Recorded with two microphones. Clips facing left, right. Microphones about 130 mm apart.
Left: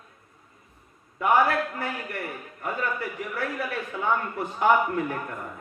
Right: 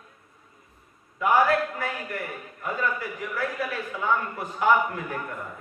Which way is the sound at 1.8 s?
30° left (ahead or behind).